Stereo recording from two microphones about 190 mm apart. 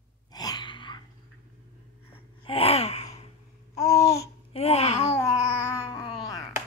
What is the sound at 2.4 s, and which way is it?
Gasp, 30° left (ahead or behind).